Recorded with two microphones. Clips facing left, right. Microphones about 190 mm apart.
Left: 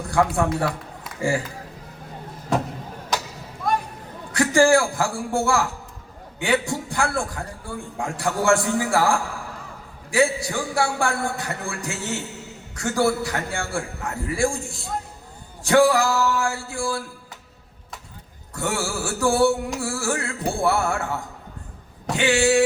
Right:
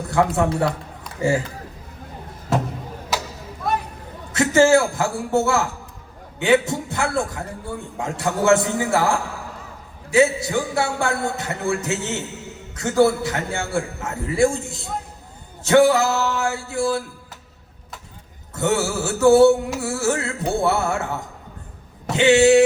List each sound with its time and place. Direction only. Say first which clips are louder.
0.1 s a man's voice: right 1 dB; 20° right (ahead or behind)
4.3 s a man's voice: right 2 dB; 20° right (ahead or behind)
18.5 s a man's voice: right 5 dB; 20° right (ahead or behind)
22.1 s a man's voice: right 6 dB; 20° right (ahead or behind)